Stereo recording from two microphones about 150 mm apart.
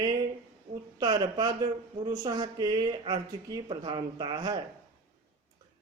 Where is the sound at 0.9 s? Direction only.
30° right (ahead or behind).